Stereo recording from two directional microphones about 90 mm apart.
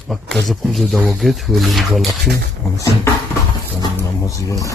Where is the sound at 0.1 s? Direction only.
Centre (ahead or behind).